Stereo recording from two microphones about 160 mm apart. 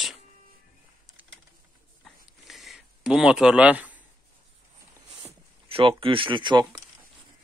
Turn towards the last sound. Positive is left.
turn(degrees=-30)  # may be behind; listen again after turning